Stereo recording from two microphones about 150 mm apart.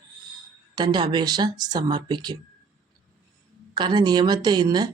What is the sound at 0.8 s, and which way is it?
Speech, 30° right (ahead or behind).